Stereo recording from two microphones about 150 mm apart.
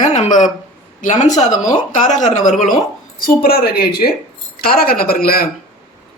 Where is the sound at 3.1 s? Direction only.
75° left (ahead or behind).